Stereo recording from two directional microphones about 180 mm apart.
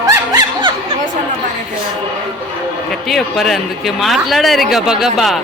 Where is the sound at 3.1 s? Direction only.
Centre (ahead or behind).